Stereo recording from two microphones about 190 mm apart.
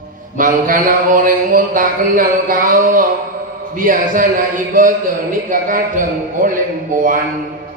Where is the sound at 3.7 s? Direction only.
45° right (ahead or behind).